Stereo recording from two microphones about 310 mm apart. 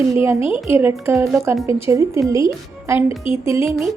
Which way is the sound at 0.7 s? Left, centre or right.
Centre.